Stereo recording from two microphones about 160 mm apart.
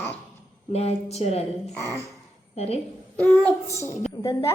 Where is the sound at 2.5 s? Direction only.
40° left (ahead or behind).